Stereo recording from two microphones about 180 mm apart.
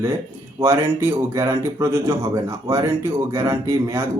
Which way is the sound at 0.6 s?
15° right (ahead or behind).